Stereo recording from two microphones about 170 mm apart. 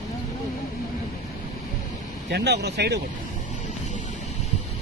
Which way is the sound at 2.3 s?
80° right.